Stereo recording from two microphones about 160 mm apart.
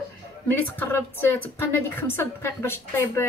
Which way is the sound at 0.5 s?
10° left (ahead or behind).